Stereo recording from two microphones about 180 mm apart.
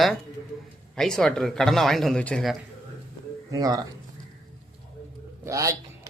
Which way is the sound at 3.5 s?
20° right (ahead or behind).